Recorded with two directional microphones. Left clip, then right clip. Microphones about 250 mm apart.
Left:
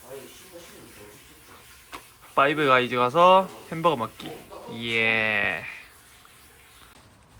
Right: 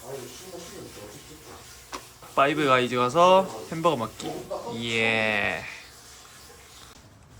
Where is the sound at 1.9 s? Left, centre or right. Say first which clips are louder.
Right 3 dB; centre.